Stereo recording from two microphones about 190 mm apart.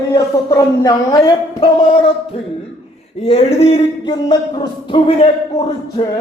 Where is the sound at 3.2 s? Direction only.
35° left (ahead or behind).